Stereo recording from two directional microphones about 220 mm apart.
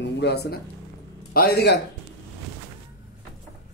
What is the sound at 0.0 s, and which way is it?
Speech, 50° left (ahead or behind).